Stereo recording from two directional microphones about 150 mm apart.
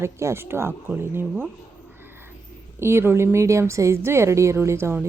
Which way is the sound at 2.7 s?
15° right (ahead or behind).